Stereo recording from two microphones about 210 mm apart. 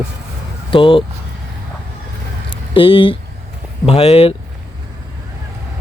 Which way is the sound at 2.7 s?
25° left (ahead or behind).